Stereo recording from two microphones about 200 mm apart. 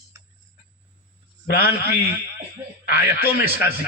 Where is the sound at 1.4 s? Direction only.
50° left (ahead or behind).